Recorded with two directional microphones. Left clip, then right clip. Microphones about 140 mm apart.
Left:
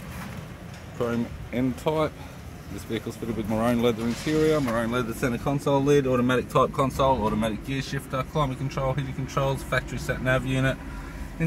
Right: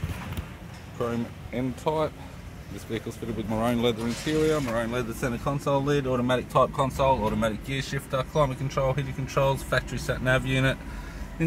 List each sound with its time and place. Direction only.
0.9 s speech: 5° left (ahead or behind)
2.9 s speech: centre (ahead or behind)
7.1 s speech: 20° right (ahead or behind); by 10.8 s 40° right (ahead or behind)